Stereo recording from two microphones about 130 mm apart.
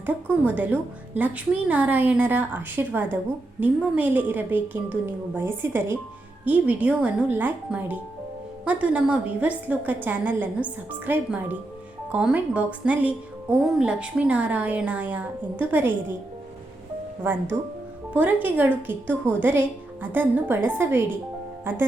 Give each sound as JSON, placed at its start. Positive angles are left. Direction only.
{"t": 0.0, "sound": "a woman's voice", "side_deg": -15}
{"t": 18.1, "sound": "a woman's voice", "side_deg": -10}